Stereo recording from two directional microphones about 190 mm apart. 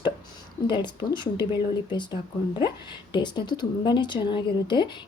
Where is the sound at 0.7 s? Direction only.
25° left (ahead or behind).